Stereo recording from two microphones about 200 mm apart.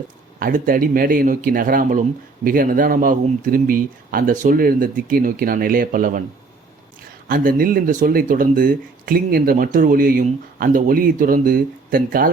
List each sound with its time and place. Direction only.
0.3 s speech: 45° right (ahead or behind)
7.3 s speech: 45° right (ahead or behind)